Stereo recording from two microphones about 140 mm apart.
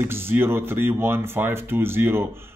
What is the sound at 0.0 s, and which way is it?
Speech, 15° right (ahead or behind).